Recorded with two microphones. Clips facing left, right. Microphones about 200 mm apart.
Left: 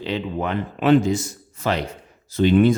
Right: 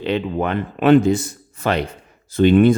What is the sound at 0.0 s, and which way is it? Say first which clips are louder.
Speech: right 4 dB; 60° right (ahead or behind).